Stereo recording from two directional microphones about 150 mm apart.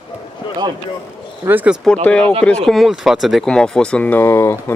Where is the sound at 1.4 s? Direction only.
10° right (ahead or behind).